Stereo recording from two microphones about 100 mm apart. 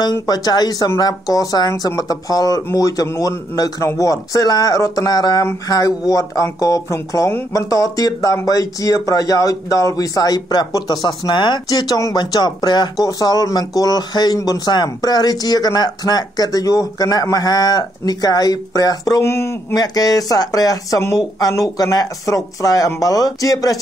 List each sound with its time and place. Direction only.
0.0 s speech: 45° left (ahead or behind); by 19.8 s 25° left (ahead or behind)
19.8 s speech: 40° left (ahead or behind)